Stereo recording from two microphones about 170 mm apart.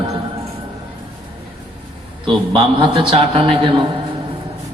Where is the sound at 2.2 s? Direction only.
30° right (ahead or behind).